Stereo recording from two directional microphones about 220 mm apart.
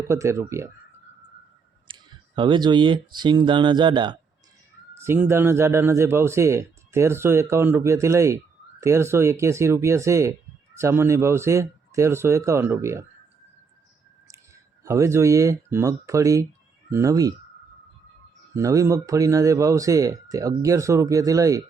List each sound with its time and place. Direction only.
0.1 s speech: 15° right (ahead or behind)
1.9 s speech: 20° right (ahead or behind)
4.9 s speech: 10° right (ahead or behind)
14.8 s speech: 15° right (ahead or behind)
18.5 s speech: 15° right (ahead or behind)